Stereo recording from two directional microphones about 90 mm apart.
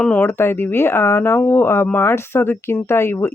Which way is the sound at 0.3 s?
25° left (ahead or behind).